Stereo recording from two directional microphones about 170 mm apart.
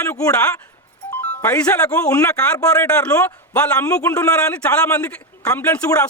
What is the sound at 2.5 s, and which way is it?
A man's voice, 15° left (ahead or behind).